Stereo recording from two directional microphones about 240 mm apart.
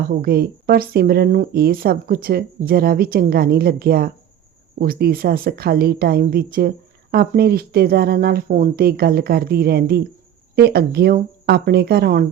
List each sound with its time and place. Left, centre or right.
0.0 s speech: right